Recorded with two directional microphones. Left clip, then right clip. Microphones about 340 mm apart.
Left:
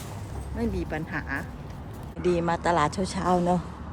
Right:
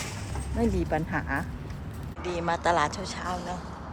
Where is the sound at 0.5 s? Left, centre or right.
Centre.